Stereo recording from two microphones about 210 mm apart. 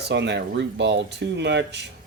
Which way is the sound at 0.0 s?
55° right (ahead or behind).